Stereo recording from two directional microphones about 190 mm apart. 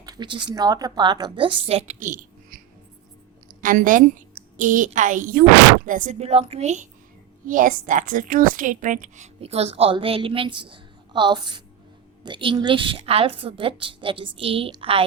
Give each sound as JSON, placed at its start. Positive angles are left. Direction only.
{"t": 0.0, "sound": "a woman's voice", "side_deg": -20}
{"t": 3.6, "sound": "a woman's voice", "side_deg": -45}